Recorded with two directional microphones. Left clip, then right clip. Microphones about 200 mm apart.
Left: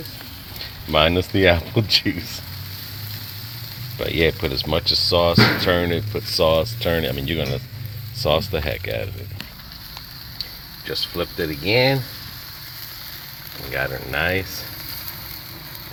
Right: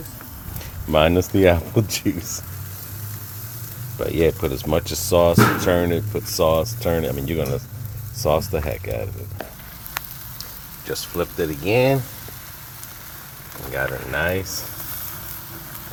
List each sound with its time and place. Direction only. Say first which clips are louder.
0.9 s speech: right 1 dB; 15° right (ahead or behind)
3.9 s speech: even; 5° right (ahead or behind)
4.6 s speech: left 7 dB; 15° right (ahead or behind)
5.6 s speech: even; 10° right (ahead or behind)
11.1 s speech: right 1 dB; 10° right (ahead or behind)
13.7 s speech: even; centre (ahead or behind)